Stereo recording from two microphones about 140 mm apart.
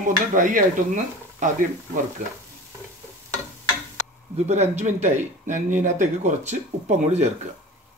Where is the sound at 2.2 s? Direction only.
60° right (ahead or behind).